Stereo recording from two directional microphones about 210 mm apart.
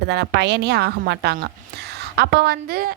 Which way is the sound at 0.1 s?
55° right (ahead or behind).